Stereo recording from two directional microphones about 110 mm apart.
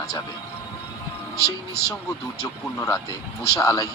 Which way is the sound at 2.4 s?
30° left (ahead or behind).